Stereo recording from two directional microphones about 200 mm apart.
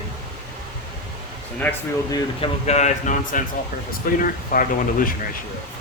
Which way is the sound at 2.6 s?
35° left (ahead or behind).